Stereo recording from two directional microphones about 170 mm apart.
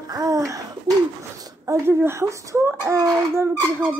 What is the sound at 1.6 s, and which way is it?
Speech, 15° right (ahead or behind).